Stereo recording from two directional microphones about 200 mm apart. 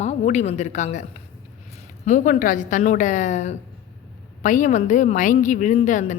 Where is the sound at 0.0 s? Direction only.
35° left (ahead or behind).